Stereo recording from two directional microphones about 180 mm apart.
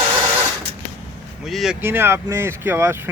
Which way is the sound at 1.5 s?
Centre (ahead or behind).